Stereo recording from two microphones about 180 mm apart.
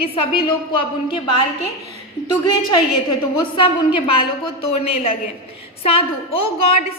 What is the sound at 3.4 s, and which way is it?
A woman's voice, 25° left (ahead or behind).